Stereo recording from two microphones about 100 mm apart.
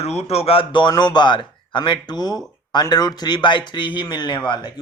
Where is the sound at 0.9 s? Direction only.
45° left (ahead or behind).